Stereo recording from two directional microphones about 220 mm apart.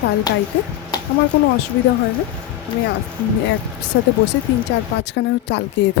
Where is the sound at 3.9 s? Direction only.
55° left (ahead or behind).